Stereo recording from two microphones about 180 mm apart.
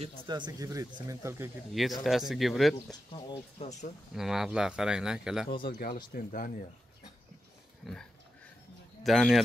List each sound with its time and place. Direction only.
0.0 s speech: 25° right (ahead or behind)
1.7 s speech: centre (ahead or behind)
3.2 s speech: 35° left (ahead or behind)
4.1 s speech: centre (ahead or behind)
5.6 s speech: 55° left (ahead or behind)
7.8 s speech: 5° left (ahead or behind)